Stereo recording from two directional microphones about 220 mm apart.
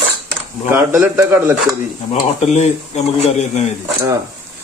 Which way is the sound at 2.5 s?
30° left (ahead or behind).